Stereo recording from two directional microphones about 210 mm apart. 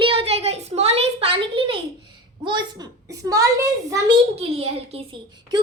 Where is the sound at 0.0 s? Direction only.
25° right (ahead or behind).